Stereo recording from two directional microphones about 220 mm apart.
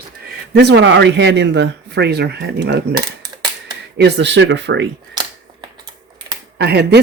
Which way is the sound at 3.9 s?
50° right (ahead or behind).